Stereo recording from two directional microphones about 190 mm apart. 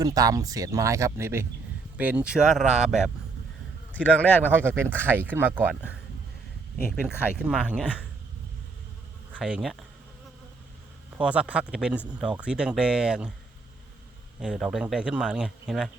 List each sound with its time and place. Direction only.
0.0 s speech: 20° right (ahead or behind); by 3.1 s 5° right (ahead or behind)
3.9 s speech: 10° left (ahead or behind)
4.5 s speech: 10° right (ahead or behind)
7.0 s speech: 5° right (ahead or behind)
9.3 s speech: 5° right (ahead or behind)
11.2 s speech: 5° right (ahead or behind)
14.3 s speech: 5° right (ahead or behind)